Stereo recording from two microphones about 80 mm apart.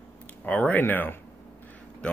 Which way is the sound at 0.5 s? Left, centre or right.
Centre.